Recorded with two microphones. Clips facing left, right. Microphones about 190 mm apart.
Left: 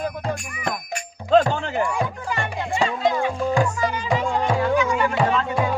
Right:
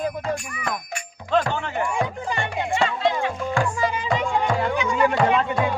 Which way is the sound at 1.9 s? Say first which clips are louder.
Even; 20° right (ahead or behind).